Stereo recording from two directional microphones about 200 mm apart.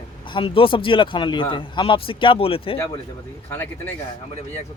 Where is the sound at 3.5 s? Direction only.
10° left (ahead or behind).